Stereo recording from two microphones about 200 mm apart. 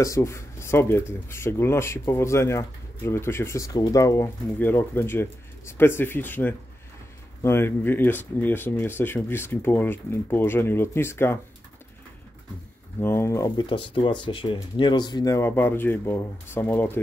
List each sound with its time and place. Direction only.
0.0 s speech: 15° left (ahead or behind)
13.0 s speech: 10° left (ahead or behind)